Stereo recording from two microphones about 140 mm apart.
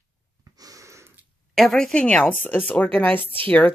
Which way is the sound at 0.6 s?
25° right (ahead or behind).